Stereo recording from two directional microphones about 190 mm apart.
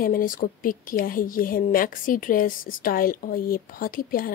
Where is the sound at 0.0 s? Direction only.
50° left (ahead or behind).